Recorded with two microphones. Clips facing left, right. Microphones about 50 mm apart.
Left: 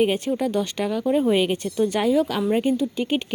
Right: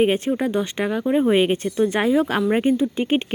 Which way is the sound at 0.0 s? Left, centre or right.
Right.